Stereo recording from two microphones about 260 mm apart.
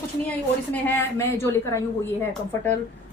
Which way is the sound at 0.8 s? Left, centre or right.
Centre.